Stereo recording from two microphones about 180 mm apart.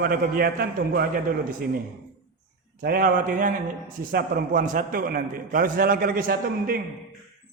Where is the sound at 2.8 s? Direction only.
55° right (ahead or behind).